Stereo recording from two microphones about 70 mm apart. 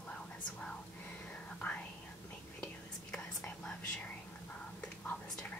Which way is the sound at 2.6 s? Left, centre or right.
Centre.